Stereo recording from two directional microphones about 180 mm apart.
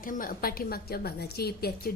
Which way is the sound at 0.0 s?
50° left (ahead or behind).